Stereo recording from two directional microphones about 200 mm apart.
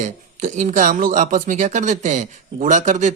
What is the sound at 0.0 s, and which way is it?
Speech, 40° right (ahead or behind).